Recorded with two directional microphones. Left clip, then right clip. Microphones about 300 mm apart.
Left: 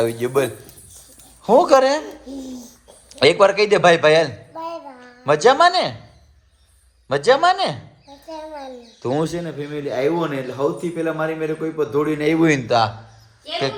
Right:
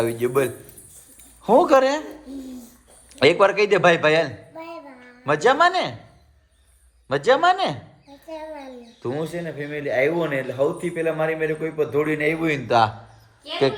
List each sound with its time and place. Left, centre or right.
0.0 s a man's voice: centre
3.1 s a woman's voice: centre
7.1 s a man's voice: centre
9.1 s a man's voice: left
9.6 s a man's voice: centre